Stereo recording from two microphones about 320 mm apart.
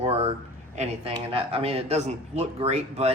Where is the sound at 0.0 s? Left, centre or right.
Centre.